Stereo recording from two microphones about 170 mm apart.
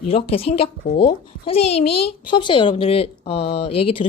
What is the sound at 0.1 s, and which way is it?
A child's voice, 35° left (ahead or behind).